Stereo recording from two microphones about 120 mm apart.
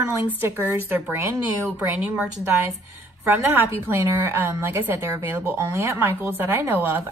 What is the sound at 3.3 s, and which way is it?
A woman's voice, 15° right (ahead or behind).